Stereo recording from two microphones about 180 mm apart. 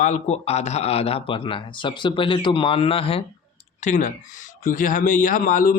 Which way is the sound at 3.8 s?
40° left (ahead or behind).